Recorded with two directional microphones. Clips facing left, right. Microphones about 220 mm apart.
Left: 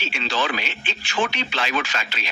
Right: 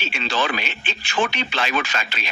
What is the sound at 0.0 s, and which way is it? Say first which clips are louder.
Speech: right 1 dB; 55° right (ahead or behind).